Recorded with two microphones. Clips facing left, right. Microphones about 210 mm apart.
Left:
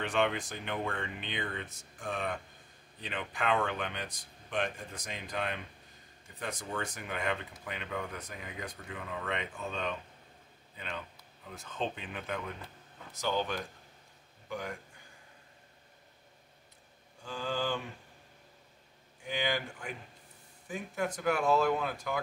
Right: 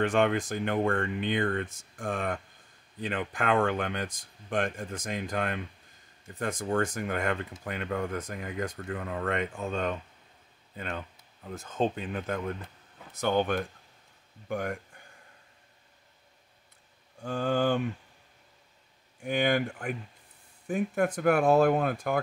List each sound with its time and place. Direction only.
0.0 s speech: 50° right (ahead or behind)
13.1 s speech: 55° right (ahead or behind)
17.2 s speech: 55° right (ahead or behind)
19.2 s speech: 55° right (ahead or behind)